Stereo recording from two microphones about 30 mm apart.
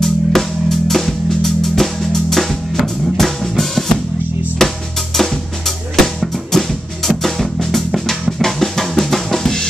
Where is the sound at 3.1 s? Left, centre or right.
Centre.